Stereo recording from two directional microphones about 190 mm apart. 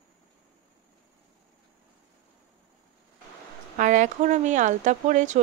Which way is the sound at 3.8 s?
40° right (ahead or behind).